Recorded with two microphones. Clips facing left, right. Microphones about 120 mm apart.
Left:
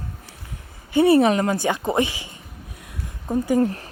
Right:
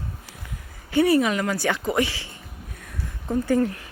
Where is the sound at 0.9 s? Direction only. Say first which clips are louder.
Left 4 dB; 30° left (ahead or behind).